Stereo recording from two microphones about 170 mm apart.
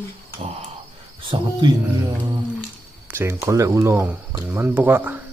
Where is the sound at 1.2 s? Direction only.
30° right (ahead or behind).